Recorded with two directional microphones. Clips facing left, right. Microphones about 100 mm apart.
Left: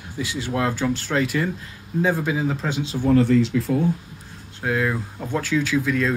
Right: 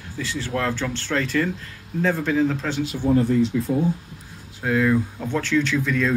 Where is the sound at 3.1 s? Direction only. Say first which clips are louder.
Left 2 dB; 85° left.